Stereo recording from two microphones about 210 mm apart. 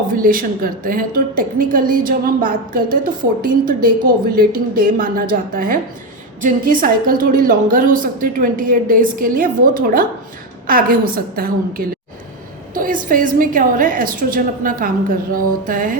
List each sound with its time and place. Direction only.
0.1 s a woman's voice: 40° right (ahead or behind)